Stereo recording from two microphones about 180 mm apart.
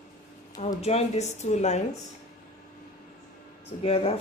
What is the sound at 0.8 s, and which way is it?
A woman's voice, 35° left (ahead or behind).